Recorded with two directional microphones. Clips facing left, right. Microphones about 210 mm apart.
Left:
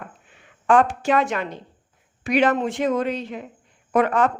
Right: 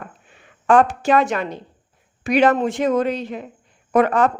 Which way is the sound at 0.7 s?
40° right (ahead or behind).